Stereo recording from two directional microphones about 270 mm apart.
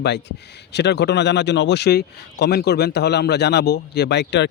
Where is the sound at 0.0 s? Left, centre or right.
Left.